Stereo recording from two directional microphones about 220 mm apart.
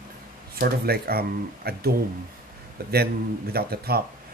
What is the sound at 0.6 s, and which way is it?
Speech, 45° right (ahead or behind).